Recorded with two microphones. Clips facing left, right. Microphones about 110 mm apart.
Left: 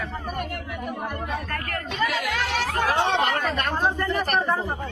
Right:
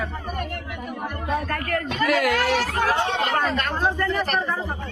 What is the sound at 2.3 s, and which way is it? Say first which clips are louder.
Speech: right 5 dB; 55° right (ahead or behind).